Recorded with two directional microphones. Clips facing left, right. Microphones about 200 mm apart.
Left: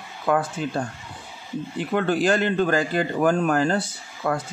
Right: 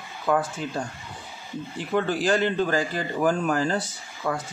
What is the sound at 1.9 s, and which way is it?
Speech, 55° left (ahead or behind).